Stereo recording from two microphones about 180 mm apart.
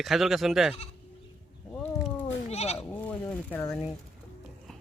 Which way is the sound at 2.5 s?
35° left (ahead or behind).